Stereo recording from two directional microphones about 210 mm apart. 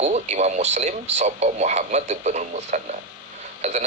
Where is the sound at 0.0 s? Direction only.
35° right (ahead or behind).